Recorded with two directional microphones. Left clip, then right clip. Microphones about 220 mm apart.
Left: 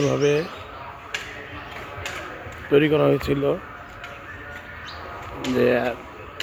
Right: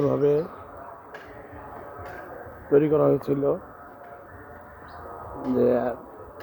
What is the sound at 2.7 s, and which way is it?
Speech, 25° left (ahead or behind).